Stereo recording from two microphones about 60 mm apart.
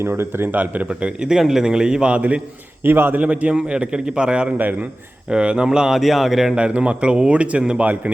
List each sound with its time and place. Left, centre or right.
0.2 s speech: right
0.6 s a man's voice: right
2.8 s speech: right
3.2 s a man's voice: right
4.5 s speech: right
5.3 s a man's voice: centre
6.6 s a man's voice: centre